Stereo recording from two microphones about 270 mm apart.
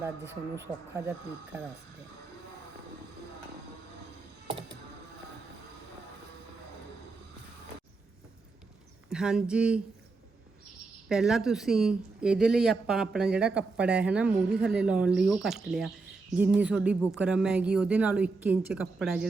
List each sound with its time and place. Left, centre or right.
0.5 s speech: centre
9.0 s speech: centre
11.1 s speech: centre